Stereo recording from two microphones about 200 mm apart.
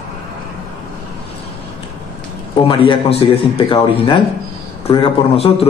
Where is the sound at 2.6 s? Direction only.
25° left (ahead or behind).